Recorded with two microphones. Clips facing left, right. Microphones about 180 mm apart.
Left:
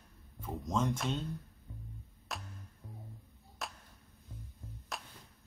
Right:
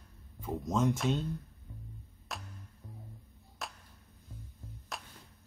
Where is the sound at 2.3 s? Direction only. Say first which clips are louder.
Even; centre (ahead or behind).